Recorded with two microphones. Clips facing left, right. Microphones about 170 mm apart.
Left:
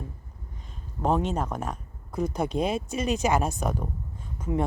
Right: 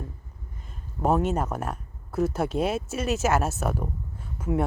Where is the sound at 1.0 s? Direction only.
5° right (ahead or behind).